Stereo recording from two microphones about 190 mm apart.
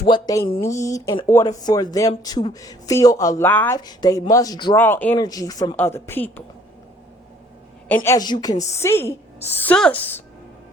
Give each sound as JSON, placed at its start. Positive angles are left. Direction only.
{"t": 0.0, "sound": "speech", "side_deg": 20}
{"t": 4.8, "sound": "speech", "side_deg": 10}
{"t": 7.9, "sound": "speech", "side_deg": 10}